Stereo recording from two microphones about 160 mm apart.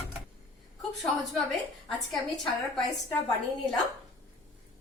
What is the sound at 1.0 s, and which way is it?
A woman's voice, centre (ahead or behind).